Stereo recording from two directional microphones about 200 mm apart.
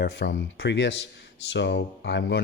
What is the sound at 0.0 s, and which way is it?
Speech, 55° left (ahead or behind).